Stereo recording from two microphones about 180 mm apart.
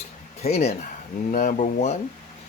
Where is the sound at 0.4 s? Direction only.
35° left (ahead or behind).